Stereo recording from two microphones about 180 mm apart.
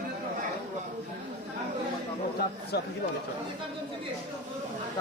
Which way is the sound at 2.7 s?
65° left (ahead or behind).